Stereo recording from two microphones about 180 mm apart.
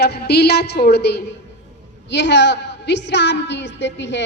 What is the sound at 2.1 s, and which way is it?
A woman's voice, 75° left (ahead or behind).